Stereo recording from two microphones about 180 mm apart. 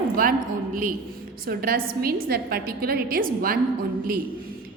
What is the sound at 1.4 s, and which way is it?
A woman's voice, 55° right (ahead or behind).